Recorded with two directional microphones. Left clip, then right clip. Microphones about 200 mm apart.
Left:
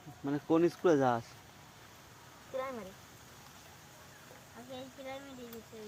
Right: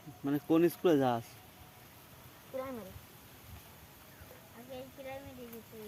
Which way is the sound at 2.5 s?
20° left (ahead or behind).